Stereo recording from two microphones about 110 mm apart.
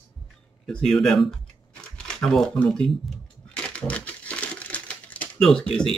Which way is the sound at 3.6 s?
10° left (ahead or behind).